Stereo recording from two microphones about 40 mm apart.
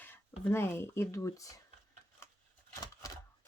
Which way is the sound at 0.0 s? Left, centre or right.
Left.